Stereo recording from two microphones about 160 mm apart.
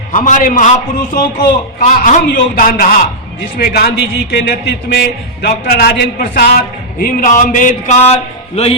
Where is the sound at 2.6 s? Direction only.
60° left (ahead or behind).